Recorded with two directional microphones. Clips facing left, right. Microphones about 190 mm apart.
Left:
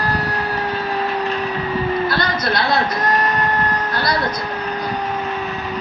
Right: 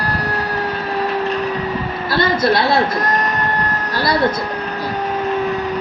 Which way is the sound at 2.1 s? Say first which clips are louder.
Right 5 dB; 25° right (ahead or behind).